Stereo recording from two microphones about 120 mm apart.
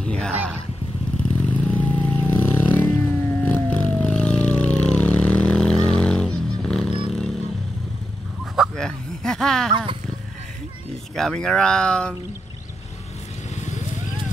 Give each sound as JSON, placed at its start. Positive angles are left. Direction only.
{"t": 0.0, "sound": "speech", "side_deg": 5}
{"t": 1.7, "sound": "vehicle", "side_deg": 15}
{"t": 8.5, "sound": "a sound", "side_deg": 5}
{"t": 11.1, "sound": "speech", "side_deg": 5}
{"t": 13.6, "sound": "vehicle", "side_deg": 75}